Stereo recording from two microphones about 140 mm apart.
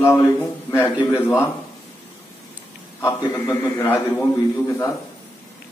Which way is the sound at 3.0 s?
20° left (ahead or behind).